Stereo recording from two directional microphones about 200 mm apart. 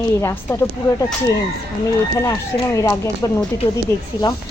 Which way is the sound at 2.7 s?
15° left (ahead or behind).